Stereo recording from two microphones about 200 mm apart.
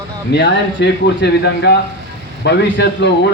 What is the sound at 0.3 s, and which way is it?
Speech, 60° left (ahead or behind).